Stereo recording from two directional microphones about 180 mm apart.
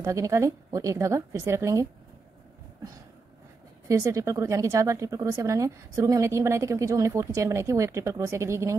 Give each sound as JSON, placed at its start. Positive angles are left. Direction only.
{"t": 0.0, "sound": "speech", "side_deg": -15}
{"t": 3.8, "sound": "speech", "side_deg": -20}